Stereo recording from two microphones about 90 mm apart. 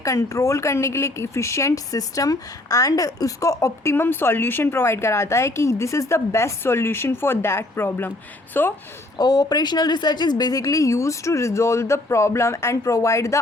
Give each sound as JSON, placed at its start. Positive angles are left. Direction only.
{"t": 0.0, "sound": "a woman's voice", "side_deg": 35}
{"t": 9.1, "sound": "speech", "side_deg": 45}